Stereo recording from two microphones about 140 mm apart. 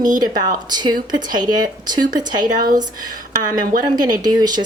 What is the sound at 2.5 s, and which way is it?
Speech, 80° right.